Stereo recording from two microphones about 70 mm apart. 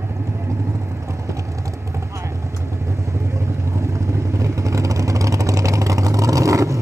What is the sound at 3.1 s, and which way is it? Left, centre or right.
Vehicle, right.